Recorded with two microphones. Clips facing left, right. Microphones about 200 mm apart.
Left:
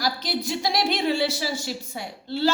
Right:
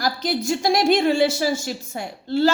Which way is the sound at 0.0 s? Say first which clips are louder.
Right 4 dB; 45° right (ahead or behind).